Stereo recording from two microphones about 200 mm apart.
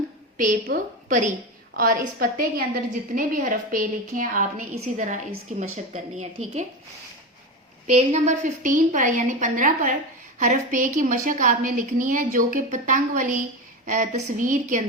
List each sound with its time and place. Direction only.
0.3 s a woman's voice: 40° right (ahead or behind)
7.9 s a woman's voice: 35° right (ahead or behind)